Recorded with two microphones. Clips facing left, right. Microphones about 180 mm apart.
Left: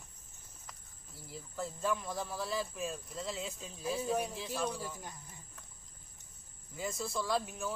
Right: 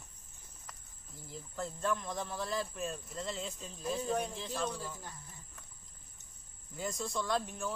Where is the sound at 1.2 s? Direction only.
5° left (ahead or behind).